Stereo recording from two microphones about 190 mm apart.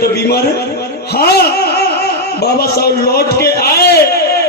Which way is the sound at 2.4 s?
55° left (ahead or behind).